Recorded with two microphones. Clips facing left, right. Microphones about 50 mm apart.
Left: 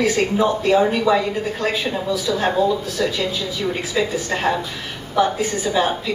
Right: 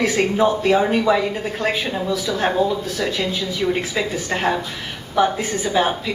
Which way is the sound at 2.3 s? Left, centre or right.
Centre.